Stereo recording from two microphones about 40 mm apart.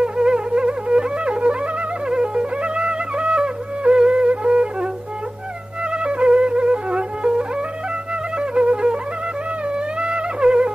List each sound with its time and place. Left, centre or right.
0.0 s music: right
5.9 s music: right
9.9 s music: right